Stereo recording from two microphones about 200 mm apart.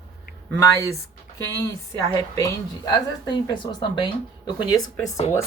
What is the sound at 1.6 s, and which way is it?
A woman's voice, 15° left (ahead or behind).